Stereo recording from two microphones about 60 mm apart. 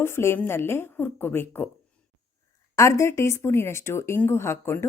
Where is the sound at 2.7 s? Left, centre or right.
Left.